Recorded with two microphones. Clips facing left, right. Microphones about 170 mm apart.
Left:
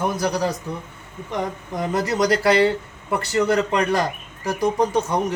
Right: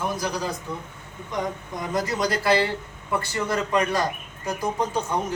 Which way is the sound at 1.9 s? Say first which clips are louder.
Left 5 dB; 70° left (ahead or behind).